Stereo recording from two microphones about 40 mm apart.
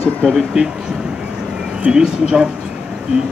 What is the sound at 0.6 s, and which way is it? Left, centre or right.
Speech, centre.